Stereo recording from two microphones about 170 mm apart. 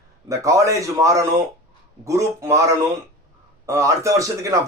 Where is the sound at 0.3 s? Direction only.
20° right (ahead or behind).